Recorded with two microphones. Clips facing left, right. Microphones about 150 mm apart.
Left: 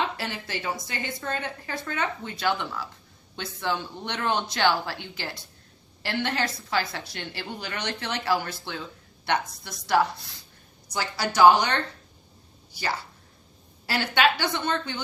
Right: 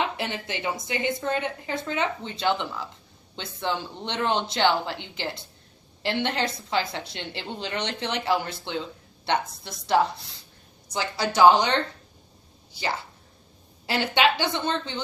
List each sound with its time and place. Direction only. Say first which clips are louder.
0.2 s a woman's voice: right 2 dB; 20° right (ahead or behind)